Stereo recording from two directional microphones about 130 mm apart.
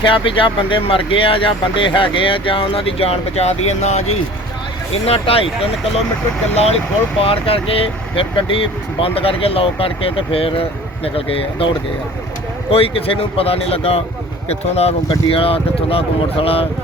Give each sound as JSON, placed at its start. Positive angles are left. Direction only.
{"t": 0.0, "sound": "speech", "side_deg": 40}
{"t": 5.0, "sound": "speech", "side_deg": 50}
{"t": 7.2, "sound": "speech", "side_deg": 45}
{"t": 12.7, "sound": "speech", "side_deg": 45}